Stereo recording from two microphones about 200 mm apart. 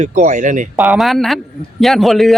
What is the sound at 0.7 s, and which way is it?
Speech, 5° right (ahead or behind).